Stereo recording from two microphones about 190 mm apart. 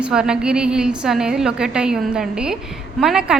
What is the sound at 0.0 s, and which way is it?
A woman's voice, 5° right (ahead or behind).